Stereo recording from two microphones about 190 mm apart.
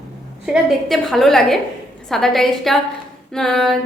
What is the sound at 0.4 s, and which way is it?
A woman's voice, centre (ahead or behind).